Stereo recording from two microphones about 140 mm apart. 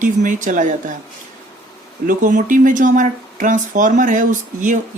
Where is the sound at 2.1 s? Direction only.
70° right (ahead or behind).